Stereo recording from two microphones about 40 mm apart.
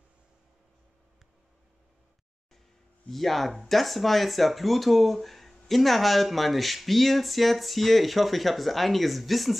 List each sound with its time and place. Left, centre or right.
3.1 s speech: centre